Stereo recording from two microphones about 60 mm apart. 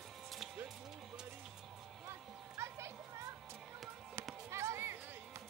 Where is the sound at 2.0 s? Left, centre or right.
Right.